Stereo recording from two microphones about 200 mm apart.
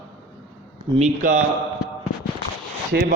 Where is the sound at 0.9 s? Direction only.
35° right (ahead or behind).